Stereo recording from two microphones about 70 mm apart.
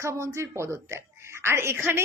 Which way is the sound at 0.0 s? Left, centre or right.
Right.